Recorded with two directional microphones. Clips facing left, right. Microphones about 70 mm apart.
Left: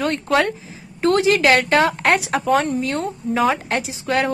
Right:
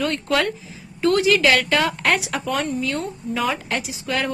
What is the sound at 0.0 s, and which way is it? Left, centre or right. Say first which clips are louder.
Speech: left 3 dB; left.